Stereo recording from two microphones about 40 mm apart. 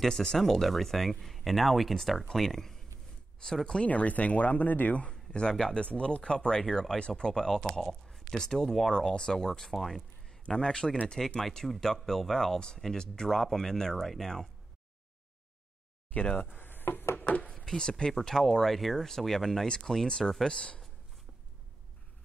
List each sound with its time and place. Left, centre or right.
0.0 s speech: centre
3.8 s speech: left
5.3 s speech: left; by 8.9 s centre
8.9 s speech: centre
10.5 s speech: centre
11.4 s speech: centre
16.1 s speech: left
16.5 s chopping: left
17.2 s chopping: left
17.7 s speech: centre